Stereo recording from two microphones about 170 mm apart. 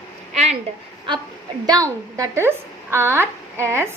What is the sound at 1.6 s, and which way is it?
A woman's voice, 20° right (ahead or behind).